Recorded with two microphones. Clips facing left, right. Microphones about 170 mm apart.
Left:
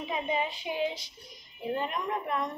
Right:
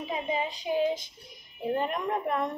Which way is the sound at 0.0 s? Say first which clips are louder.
Even; 35° right (ahead or behind).